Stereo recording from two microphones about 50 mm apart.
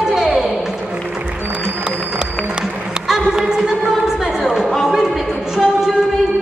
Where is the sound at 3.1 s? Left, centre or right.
Centre.